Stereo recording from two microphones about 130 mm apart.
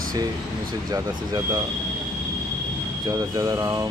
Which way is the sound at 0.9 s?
25° right (ahead or behind).